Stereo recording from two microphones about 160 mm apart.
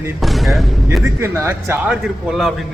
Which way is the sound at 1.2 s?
15° right (ahead or behind).